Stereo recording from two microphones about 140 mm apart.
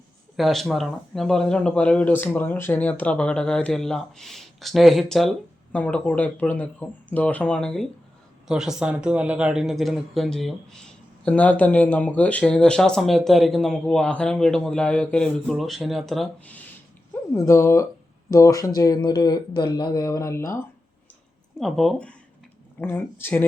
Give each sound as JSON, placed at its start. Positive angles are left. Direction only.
{"t": 0.3, "sound": "speech", "side_deg": 0}
{"t": 17.3, "sound": "speech", "side_deg": 20}
{"t": 21.6, "sound": "speech", "side_deg": 0}